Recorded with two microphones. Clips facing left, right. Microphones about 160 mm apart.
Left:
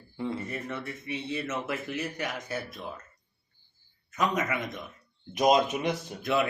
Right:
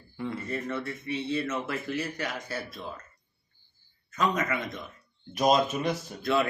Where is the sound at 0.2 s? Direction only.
20° left (ahead or behind).